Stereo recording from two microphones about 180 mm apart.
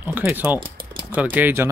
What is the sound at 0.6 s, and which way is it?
Typing, 30° right (ahead or behind).